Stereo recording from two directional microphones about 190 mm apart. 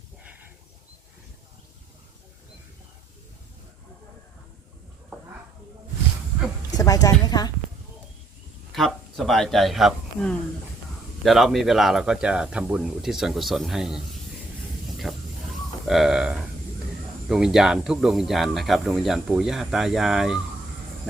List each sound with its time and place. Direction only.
6.7 s a woman's voice: 20° left (ahead or behind)
8.7 s speech: centre (ahead or behind)
15.1 s a sound: centre (ahead or behind)
15.9 s speech: centre (ahead or behind)